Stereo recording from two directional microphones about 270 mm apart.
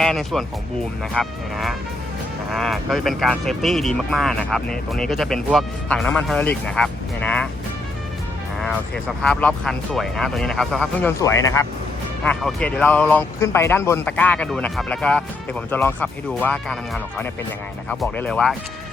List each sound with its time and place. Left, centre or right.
0.0 s speech: centre
8.6 s speech: centre
12.2 s speech: centre